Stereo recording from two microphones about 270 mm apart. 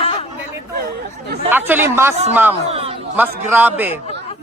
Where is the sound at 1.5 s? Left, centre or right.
Centre.